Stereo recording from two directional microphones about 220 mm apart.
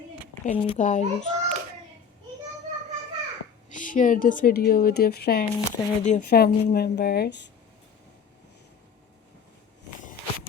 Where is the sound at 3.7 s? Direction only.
35° left (ahead or behind).